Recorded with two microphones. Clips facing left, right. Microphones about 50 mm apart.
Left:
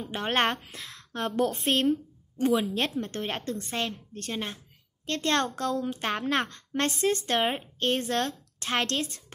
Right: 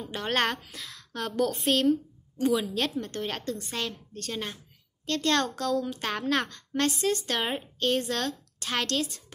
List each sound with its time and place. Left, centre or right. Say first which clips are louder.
0.0 s a woman's voice: left 1 dB; left
6.9 s a woman's voice: left 2 dB; left